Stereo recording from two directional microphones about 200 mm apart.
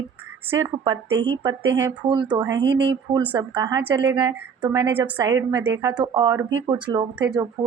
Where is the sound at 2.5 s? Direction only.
60° right (ahead or behind).